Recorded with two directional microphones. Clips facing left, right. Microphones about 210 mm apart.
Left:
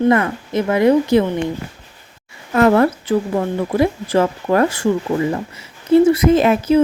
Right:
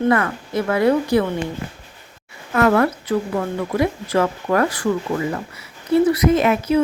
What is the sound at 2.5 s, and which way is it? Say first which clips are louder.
Speech: left 3 dB; 25° left (ahead or behind).